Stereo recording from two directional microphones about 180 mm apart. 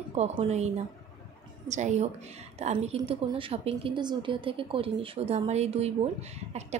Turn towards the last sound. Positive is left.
turn(degrees=-40)  # may be behind; listen again after turning